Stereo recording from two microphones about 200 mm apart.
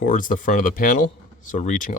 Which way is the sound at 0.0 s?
40° left (ahead or behind).